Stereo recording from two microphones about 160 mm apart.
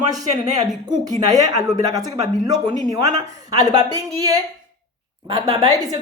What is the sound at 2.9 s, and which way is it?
Speech, 25° right (ahead or behind).